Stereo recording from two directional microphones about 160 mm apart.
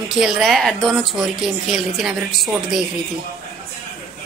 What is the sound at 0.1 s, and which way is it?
Speech, centre (ahead or behind).